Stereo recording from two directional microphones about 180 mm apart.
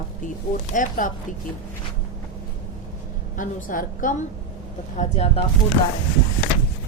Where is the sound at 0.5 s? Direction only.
45° left (ahead or behind).